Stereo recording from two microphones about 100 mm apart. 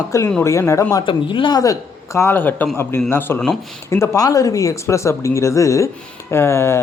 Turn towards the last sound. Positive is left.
turn(degrees=25)  # may be behind; listen again after turning